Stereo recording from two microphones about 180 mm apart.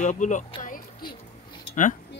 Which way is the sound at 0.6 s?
50° left (ahead or behind).